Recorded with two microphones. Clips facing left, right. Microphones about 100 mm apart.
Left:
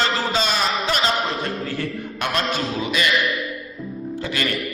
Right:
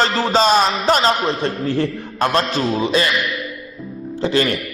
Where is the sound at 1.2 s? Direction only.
25° right (ahead or behind).